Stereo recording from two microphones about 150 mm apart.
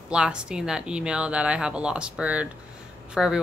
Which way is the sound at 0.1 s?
5° right (ahead or behind).